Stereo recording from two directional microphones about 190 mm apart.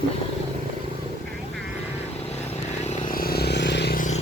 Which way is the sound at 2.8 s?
40° left (ahead or behind).